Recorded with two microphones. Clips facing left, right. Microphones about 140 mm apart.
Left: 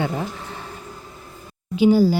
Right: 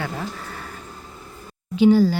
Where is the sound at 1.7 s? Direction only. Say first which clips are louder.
Even; 10° left (ahead or behind).